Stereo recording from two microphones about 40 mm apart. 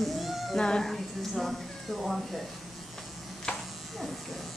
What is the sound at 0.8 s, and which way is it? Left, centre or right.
Speech, centre.